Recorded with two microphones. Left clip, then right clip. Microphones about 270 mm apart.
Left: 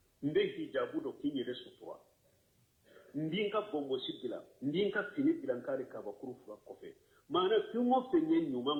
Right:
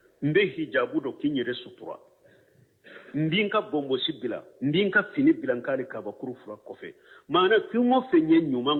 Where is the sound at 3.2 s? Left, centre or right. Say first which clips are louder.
Right 10 dB; right.